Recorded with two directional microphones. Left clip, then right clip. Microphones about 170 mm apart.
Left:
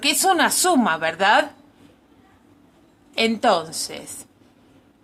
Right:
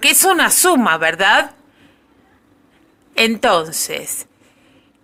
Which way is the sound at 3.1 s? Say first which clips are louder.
Right 5 dB; 20° right (ahead or behind).